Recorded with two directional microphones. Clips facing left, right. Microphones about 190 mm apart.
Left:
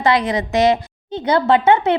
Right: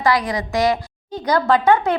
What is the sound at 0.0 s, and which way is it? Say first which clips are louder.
A woman's voice: left 2 dB; 20° left (ahead or behind).